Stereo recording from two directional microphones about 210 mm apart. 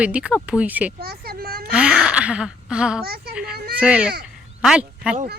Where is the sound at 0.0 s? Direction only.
5° right (ahead or behind).